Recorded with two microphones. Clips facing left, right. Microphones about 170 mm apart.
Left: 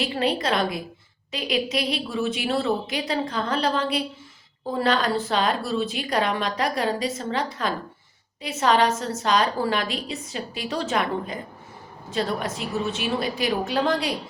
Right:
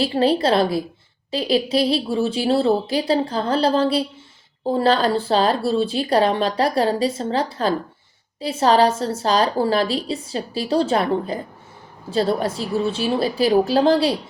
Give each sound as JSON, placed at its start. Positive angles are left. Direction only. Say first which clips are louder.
{"t": 0.0, "sound": "a woman's voice", "louder": "right 6 dB", "side_deg": -30}